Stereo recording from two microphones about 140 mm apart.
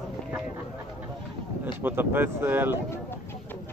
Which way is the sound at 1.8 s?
15° right (ahead or behind).